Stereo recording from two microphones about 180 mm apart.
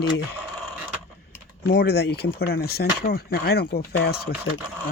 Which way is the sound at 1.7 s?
60° left (ahead or behind).